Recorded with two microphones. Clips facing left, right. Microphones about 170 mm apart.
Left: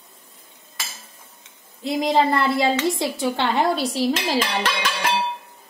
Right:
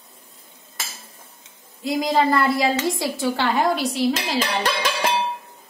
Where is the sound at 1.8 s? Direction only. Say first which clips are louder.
Even; 25° left (ahead or behind).